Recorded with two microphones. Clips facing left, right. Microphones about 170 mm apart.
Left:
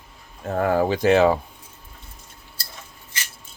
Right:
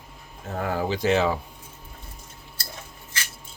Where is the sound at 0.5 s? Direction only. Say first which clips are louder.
Left 6 dB; 55° left (ahead or behind).